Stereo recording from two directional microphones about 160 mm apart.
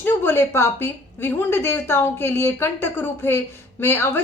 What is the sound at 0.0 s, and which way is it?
A woman's voice, 15° left (ahead or behind).